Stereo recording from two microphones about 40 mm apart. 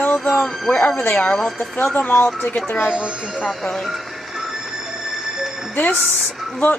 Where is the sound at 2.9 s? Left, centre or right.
Right.